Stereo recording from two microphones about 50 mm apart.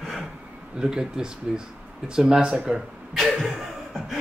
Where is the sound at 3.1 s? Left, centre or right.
Centre.